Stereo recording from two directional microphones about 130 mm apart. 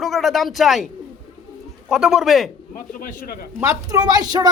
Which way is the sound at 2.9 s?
90° left.